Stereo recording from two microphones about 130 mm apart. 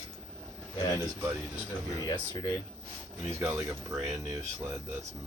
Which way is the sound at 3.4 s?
15° right (ahead or behind).